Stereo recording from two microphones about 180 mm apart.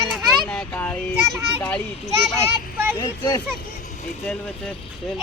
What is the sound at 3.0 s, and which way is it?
Speech, 20° left (ahead or behind).